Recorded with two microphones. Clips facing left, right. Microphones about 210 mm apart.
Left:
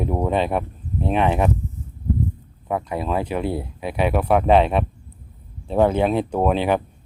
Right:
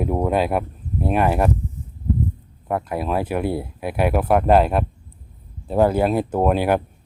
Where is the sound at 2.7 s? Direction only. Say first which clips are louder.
Right 1 dB; 5° right (ahead or behind).